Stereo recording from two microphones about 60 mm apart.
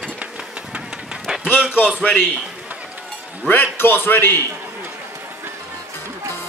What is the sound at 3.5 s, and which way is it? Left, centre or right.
Speech, left.